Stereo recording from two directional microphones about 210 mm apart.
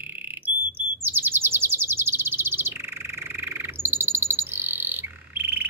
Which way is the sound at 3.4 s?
10° right (ahead or behind).